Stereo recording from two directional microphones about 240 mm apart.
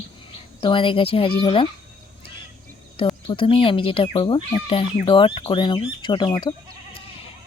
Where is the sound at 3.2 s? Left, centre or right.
Left.